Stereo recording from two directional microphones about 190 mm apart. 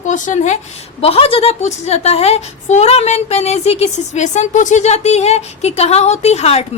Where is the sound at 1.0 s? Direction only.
30° left (ahead or behind).